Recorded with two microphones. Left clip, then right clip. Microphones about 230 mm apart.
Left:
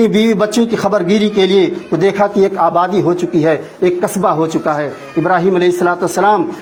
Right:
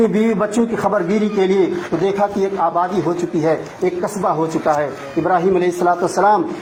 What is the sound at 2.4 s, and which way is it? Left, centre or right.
A man's voice, left.